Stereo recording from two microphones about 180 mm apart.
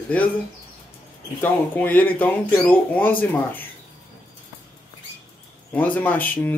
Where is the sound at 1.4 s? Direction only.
10° left (ahead or behind).